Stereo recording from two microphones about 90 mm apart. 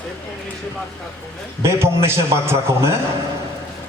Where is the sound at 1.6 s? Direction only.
30° right (ahead or behind).